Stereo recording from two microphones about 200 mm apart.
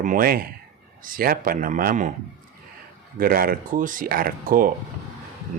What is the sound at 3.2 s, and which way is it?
Speech, 45° right (ahead or behind).